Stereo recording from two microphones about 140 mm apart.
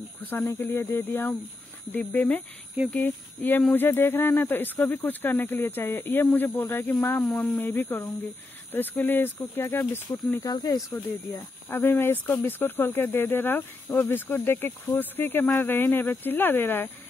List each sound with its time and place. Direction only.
0.2 s speech: 15° left (ahead or behind)
10.4 s speech: 30° left (ahead or behind)
11.3 s speech: 15° left (ahead or behind)